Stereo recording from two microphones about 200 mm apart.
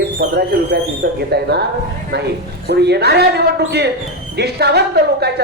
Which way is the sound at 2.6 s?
55° right (ahead or behind).